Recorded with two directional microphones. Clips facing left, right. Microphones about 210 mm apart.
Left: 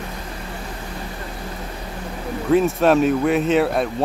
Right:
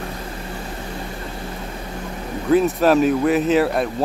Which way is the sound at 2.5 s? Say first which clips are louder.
Even; centre (ahead or behind).